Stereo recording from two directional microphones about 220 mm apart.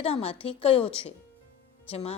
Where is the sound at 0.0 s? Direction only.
25° left (ahead or behind).